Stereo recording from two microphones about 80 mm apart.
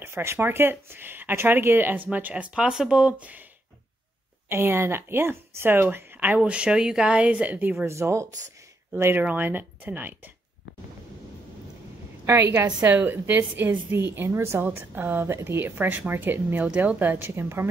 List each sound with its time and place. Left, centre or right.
0.0 s speech: right
4.5 s speech: right
12.3 s a woman's voice: right